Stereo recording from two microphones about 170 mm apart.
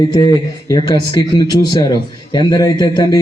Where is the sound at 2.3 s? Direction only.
25° left (ahead or behind).